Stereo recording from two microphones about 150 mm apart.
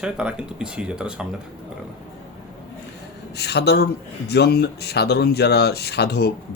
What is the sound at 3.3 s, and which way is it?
Speech, 90° left.